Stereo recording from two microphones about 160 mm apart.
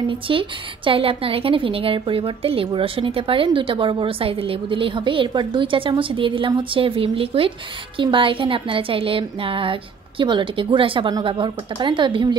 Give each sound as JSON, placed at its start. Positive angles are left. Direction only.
{"t": 0.3, "sound": "a woman's voice", "side_deg": -35}